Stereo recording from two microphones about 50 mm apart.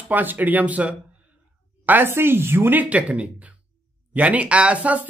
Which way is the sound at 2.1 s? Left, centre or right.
Right.